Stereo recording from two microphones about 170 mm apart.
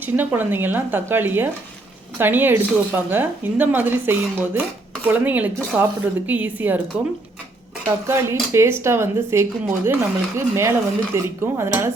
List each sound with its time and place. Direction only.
0.0 s speech: 10° right (ahead or behind)
8.0 s speech: 15° right (ahead or behind)